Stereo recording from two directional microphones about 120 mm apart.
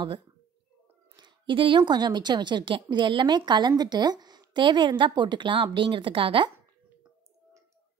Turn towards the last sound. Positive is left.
turn(degrees=-45)  # may be behind; listen again after turning